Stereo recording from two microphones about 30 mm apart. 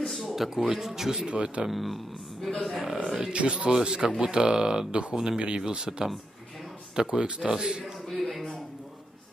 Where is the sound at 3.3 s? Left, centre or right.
Right.